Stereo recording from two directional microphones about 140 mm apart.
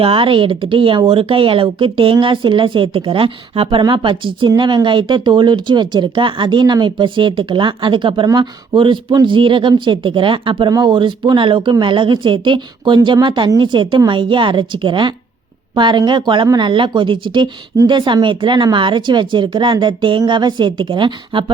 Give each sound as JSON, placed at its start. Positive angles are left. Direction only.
{"t": 0.0, "sound": "speech", "side_deg": -40}